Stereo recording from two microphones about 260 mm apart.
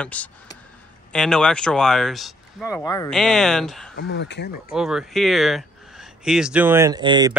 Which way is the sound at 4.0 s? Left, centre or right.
Left.